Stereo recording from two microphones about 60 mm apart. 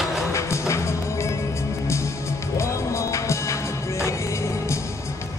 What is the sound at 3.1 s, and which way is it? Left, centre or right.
Music, left.